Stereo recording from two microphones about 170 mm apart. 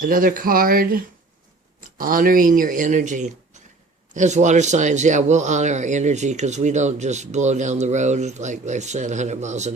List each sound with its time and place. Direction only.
0.0 s speech: 55° right (ahead or behind)